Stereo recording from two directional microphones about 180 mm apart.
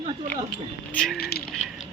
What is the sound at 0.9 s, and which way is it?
Speech, 5° left (ahead or behind).